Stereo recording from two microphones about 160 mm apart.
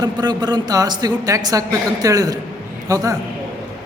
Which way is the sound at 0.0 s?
25° right (ahead or behind).